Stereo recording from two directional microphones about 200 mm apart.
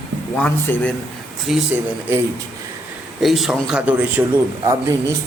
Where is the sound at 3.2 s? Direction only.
Centre (ahead or behind).